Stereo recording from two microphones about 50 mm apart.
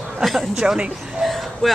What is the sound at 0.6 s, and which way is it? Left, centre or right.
Speech, centre.